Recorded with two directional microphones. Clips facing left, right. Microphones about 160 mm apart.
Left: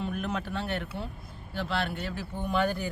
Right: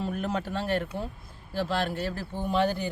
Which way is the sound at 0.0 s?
30° right (ahead or behind).